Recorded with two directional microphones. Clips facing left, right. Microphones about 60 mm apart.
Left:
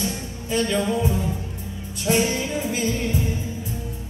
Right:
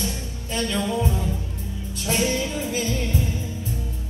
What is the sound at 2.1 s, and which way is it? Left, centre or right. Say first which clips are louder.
Music: left 2 dB; left.